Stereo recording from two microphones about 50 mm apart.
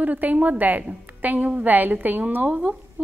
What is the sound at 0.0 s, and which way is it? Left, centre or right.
A woman's voice, right.